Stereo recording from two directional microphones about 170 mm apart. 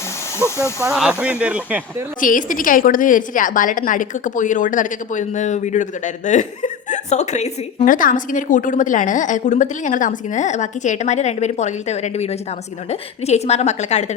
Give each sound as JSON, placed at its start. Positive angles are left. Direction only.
{"t": 0.3, "sound": "speech", "side_deg": 15}
{"t": 0.9, "sound": "speech", "side_deg": -5}
{"t": 2.2, "sound": "a woman's voice", "side_deg": 50}